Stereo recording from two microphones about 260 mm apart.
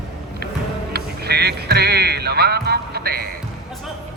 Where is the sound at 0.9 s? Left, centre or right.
Right.